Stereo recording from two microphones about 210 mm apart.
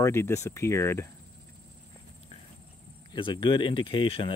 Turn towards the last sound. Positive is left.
turn(degrees=25)  # may be behind; listen again after turning